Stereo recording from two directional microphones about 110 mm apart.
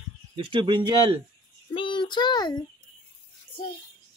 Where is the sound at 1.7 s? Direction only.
50° left (ahead or behind).